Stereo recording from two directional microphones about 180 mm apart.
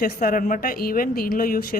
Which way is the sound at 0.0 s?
50° left (ahead or behind).